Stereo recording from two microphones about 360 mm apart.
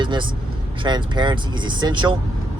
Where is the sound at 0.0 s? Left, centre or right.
Centre.